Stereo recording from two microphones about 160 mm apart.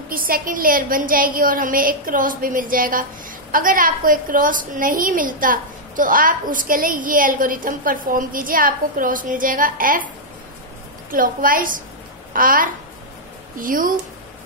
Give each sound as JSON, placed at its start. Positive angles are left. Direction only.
{"t": 0.1, "sound": "a woman's voice", "side_deg": -65}
{"t": 11.1, "sound": "a woman's voice", "side_deg": -60}